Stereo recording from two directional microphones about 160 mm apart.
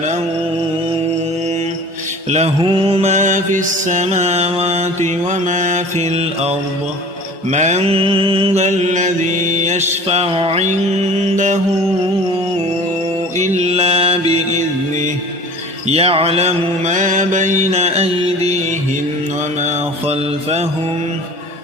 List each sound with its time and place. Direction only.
2.6 s mantra: 35° right (ahead or behind)
13.4 s mantra: 45° right (ahead or behind)
19.6 s mantra: 40° right (ahead or behind)